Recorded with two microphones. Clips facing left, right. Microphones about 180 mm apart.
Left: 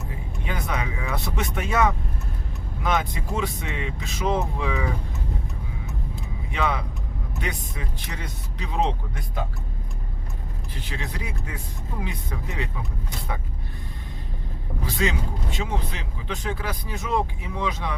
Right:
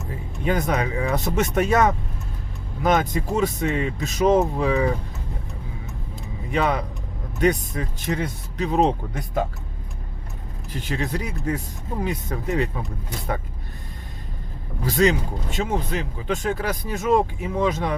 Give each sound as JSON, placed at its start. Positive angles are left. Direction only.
{"t": 0.4, "sound": "speech", "side_deg": -40}
{"t": 6.5, "sound": "speech", "side_deg": -40}
{"t": 10.8, "sound": "speech", "side_deg": -45}
{"t": 14.8, "sound": "speech", "side_deg": -40}